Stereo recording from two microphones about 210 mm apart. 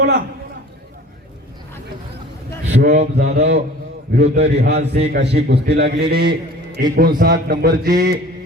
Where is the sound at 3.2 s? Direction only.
55° right (ahead or behind).